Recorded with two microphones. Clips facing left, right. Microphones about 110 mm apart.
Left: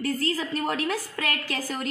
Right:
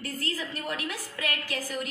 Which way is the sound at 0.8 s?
40° left (ahead or behind).